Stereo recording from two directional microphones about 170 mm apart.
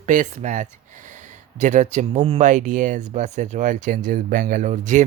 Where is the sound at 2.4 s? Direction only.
50° right (ahead or behind).